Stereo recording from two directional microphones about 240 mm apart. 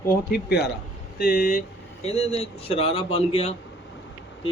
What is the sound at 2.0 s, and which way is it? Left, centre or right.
Speech, left.